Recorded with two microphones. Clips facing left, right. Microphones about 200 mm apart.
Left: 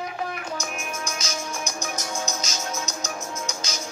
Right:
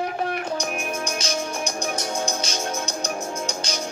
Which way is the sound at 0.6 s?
30° right (ahead or behind).